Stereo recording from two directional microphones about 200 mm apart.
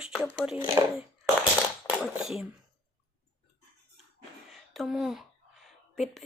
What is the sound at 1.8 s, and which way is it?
Speech, 5° right (ahead or behind).